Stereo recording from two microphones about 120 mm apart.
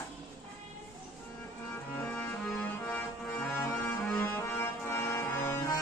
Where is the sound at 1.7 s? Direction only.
10° left (ahead or behind).